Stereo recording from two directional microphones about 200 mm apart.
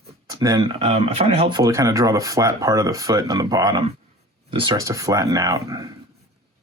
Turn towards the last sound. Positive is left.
turn(degrees=-15)  # may be behind; listen again after turning